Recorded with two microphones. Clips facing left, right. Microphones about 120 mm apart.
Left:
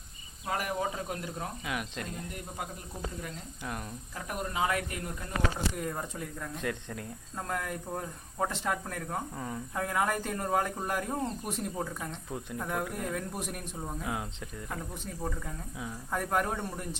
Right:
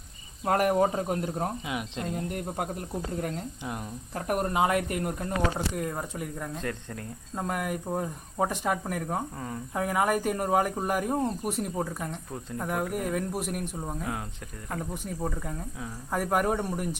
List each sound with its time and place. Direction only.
0.4 s speech: 50° right (ahead or behind)
1.6 s speech: 20° right (ahead or behind)
2.1 s speech: 50° right (ahead or behind)
3.6 s speech: 20° right (ahead or behind)
4.1 s speech: 50° right (ahead or behind)
4.6 s a man's voice: 35° right (ahead or behind)
4.9 s speech: 50° right (ahead or behind)
5.8 s speech: 5° right (ahead or behind)
6.6 s speech: 10° left (ahead or behind)
7.3 s speech: 15° right (ahead or behind)
9.4 s speech: 5° right (ahead or behind)
14.0 s speech: 15° left (ahead or behind)
15.0 s speech: 10° right (ahead or behind)